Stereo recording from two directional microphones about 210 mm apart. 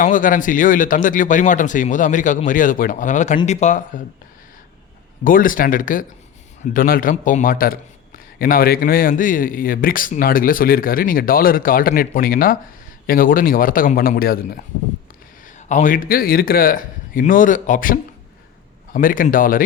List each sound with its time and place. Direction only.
0.0 s speech: 40° left (ahead or behind)
5.2 s a man's voice: 40° left (ahead or behind)